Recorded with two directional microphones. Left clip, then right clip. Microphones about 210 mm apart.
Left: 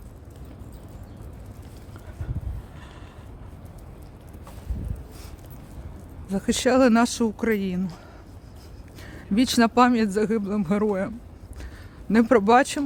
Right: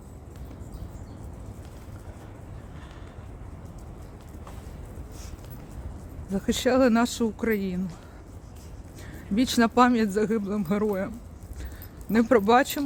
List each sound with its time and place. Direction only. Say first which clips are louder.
6.2 s speech: left 2 dB; 15° left (ahead or behind)
9.0 s speech: left 3 dB; 15° left (ahead or behind)
12.1 s speech: left 2 dB; 20° left (ahead or behind)